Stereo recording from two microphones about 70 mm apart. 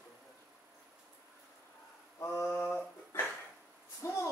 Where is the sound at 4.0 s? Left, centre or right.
Left.